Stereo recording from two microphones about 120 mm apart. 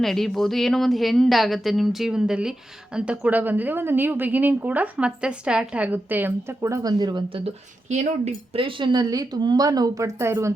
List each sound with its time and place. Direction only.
0.0 s speech: centre (ahead or behind); by 6.6 s 15° right (ahead or behind)
6.6 s speech: 25° right (ahead or behind)
7.4 s speech: 75° right (ahead or behind)
8.5 s speech: 45° right (ahead or behind); by 10.5 s 25° right (ahead or behind)